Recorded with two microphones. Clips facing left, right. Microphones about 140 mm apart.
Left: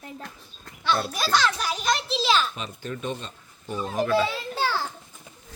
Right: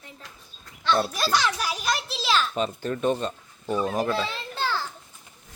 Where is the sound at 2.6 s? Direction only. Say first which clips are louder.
Right 7 dB; 40° right (ahead or behind).